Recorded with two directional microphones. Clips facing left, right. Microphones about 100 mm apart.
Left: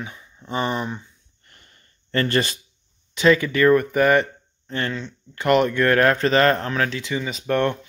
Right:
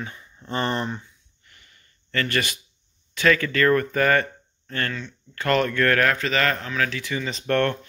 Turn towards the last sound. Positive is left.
turn(degrees=10)  # may be behind; listen again after turning